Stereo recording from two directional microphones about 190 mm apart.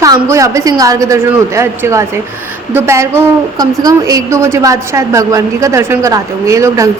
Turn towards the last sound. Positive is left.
turn(degrees=-15)  # may be behind; listen again after turning